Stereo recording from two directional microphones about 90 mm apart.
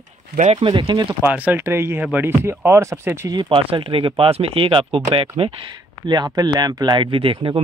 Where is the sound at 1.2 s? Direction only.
15° right (ahead or behind).